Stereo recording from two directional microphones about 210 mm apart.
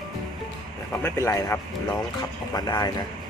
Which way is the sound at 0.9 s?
10° left (ahead or behind).